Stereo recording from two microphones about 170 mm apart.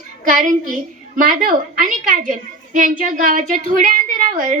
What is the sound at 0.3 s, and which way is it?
A woman's voice, 50° right (ahead or behind).